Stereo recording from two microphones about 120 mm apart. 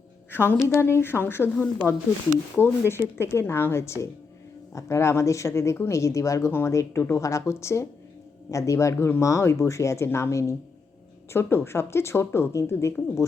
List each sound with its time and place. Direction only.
0.3 s a woman's voice: 20° left (ahead or behind)
2.6 s speech: 5° left (ahead or behind)
3.2 s speech: 20° left (ahead or behind)